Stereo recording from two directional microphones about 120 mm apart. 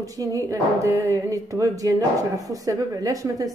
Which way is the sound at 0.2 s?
30° right (ahead or behind).